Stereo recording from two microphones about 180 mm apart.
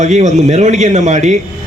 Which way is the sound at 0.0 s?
40° right (ahead or behind).